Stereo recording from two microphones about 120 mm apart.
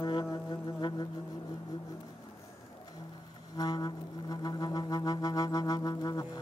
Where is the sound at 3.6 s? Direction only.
35° left (ahead or behind).